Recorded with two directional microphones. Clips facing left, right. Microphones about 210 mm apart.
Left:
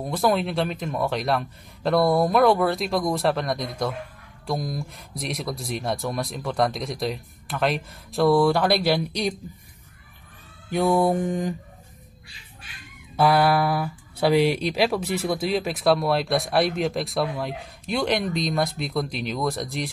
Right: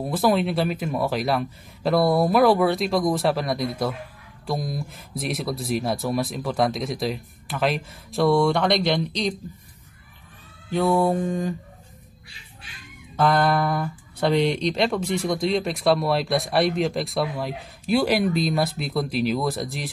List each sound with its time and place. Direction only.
0.0 s speech: 5° right (ahead or behind)
10.7 s mantra: 15° left (ahead or behind)
13.1 s speech: 10° left (ahead or behind)